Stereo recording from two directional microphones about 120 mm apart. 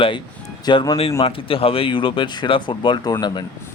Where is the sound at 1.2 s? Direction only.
50° left (ahead or behind).